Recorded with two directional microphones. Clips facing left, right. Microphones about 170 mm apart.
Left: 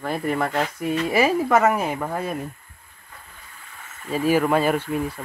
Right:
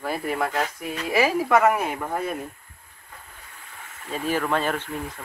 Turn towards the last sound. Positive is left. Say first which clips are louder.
# left 6 dB
turn(degrees=10)  # may be behind; listen again after turning